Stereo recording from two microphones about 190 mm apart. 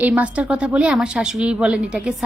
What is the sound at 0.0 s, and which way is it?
A woman's voice, 5° right (ahead or behind).